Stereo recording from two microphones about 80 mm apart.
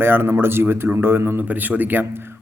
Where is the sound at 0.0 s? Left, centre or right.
Right.